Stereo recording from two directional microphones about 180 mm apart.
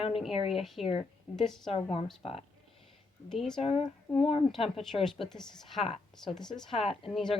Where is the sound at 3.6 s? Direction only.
30° left (ahead or behind).